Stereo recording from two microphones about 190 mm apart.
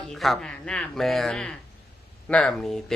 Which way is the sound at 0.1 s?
Centre (ahead or behind).